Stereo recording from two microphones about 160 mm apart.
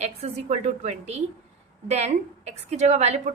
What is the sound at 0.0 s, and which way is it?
A woman's voice, 40° right (ahead or behind).